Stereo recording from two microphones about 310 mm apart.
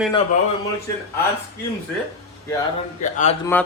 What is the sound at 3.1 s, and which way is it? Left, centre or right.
Speech, left.